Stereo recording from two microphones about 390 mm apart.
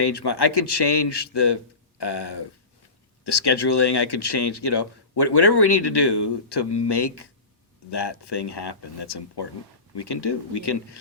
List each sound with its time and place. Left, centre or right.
0.0 s speech: left